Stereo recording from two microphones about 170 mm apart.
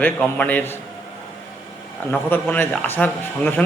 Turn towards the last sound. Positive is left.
turn(degrees=10)  # may be behind; listen again after turning